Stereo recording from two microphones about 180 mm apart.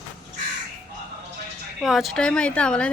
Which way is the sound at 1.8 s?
Centre (ahead or behind).